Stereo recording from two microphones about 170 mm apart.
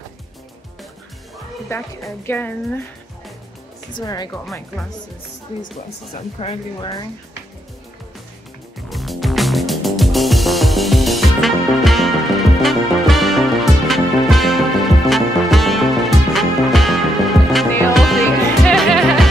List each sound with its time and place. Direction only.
1.7 s speech: 15° left (ahead or behind)
3.9 s speech: 25° left (ahead or behind)
4.3 s speech: 5° left (ahead or behind)
6.4 s speech: 35° left (ahead or behind)
8.8 s music: centre (ahead or behind)
18.7 s music: centre (ahead or behind)